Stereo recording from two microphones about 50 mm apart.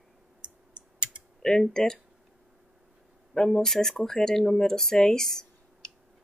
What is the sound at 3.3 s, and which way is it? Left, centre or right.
Speech, centre.